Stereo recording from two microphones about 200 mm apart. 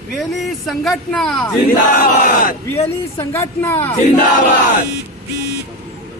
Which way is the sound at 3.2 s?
15° left (ahead or behind).